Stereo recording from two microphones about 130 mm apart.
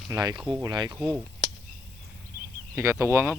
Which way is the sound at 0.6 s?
35° right (ahead or behind).